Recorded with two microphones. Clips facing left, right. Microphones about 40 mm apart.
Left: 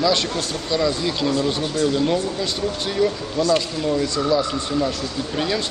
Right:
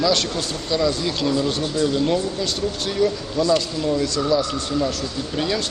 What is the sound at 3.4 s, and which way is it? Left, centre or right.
Speech, left.